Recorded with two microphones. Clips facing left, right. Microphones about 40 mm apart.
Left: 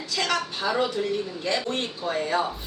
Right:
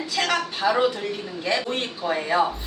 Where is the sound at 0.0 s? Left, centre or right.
Centre.